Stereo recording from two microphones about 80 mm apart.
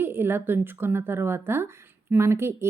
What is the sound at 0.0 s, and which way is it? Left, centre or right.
Speech, right.